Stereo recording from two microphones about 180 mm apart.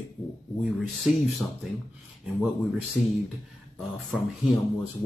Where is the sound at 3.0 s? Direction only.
45° left (ahead or behind).